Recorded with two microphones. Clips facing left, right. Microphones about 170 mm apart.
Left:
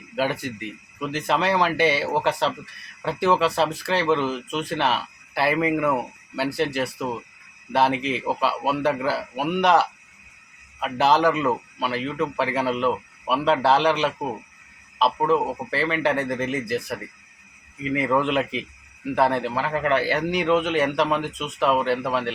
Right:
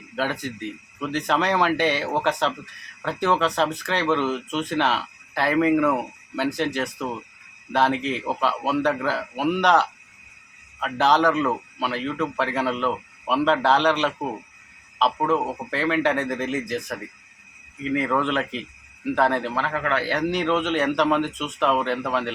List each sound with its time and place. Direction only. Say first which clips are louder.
0.2 s a man's voice: left 2 dB; 10° left (ahead or behind)
19.7 s a man's voice: left 5 dB; 20° left (ahead or behind)
20.1 s a man's voice: left 1 dB; 10° left (ahead or behind)